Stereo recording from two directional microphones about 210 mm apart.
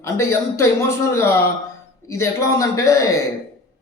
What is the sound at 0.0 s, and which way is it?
A man's voice, 15° left (ahead or behind).